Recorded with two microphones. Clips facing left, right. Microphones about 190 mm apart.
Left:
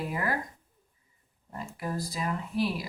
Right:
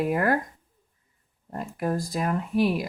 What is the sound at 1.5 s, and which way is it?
Speech, 55° right (ahead or behind).